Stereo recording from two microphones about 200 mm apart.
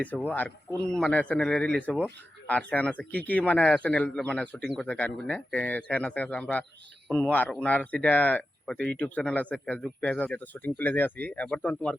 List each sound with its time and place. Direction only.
0.0 s speech: 10° left (ahead or behind)